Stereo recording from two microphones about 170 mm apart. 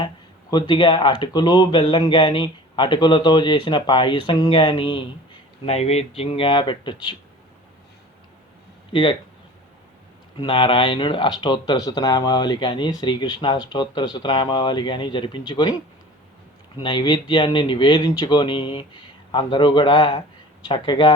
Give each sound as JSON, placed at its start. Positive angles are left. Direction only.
{"t": 0.5, "sound": "speech", "side_deg": 30}
{"t": 8.9, "sound": "speech", "side_deg": 30}
{"t": 10.3, "sound": "speech", "side_deg": 30}
{"t": 16.8, "sound": "speech", "side_deg": 25}